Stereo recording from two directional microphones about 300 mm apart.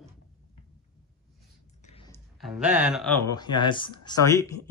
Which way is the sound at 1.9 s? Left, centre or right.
Centre.